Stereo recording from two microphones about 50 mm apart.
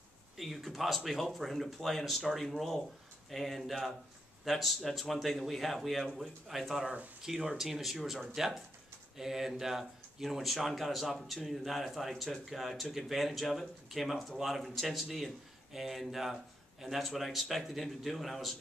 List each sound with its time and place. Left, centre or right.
0.4 s speech: centre